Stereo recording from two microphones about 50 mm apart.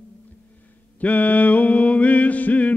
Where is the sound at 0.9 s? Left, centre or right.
Left.